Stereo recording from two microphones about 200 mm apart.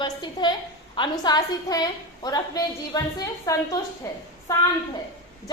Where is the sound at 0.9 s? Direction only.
25° left (ahead or behind).